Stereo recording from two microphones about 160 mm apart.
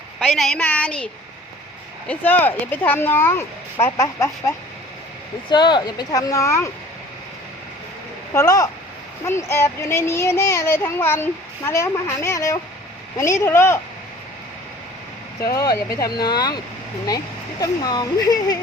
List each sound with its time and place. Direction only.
0.3 s speech: centre (ahead or behind); by 6.7 s 20° left (ahead or behind)
8.3 s speech: 20° left (ahead or behind)
15.5 s speech: 20° left (ahead or behind)
17.6 s speech: 25° left (ahead or behind)